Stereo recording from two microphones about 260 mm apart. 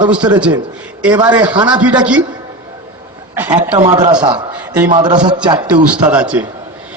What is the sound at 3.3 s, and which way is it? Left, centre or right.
A man's voice, centre.